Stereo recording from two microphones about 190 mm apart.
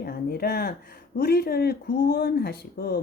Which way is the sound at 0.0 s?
55° left (ahead or behind).